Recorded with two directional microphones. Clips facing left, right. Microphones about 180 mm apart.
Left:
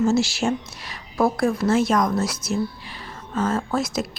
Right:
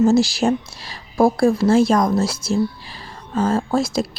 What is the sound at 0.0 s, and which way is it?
A woman's voice, 35° right (ahead or behind).